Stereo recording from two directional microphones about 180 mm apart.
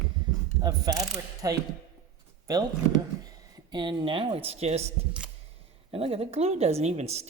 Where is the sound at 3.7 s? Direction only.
25° right (ahead or behind).